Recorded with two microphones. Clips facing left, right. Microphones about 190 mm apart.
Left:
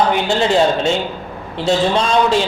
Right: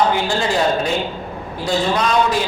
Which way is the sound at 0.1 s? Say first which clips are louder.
Left 4 dB; 20° left (ahead or behind).